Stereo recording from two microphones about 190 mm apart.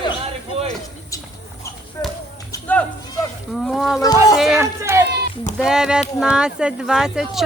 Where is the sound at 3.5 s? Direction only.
Centre (ahead or behind).